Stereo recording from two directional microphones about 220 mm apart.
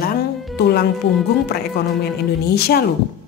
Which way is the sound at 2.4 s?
45° left (ahead or behind).